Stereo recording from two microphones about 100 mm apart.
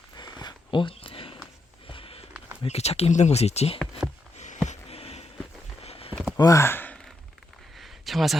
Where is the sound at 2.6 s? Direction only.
90° left.